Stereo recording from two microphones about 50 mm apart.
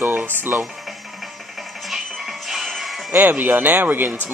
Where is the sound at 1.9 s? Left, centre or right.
Centre.